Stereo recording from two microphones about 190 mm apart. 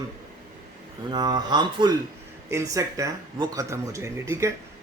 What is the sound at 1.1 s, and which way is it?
A man's voice, 20° right (ahead or behind).